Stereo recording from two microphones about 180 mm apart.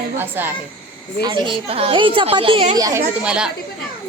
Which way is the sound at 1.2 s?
25° right (ahead or behind).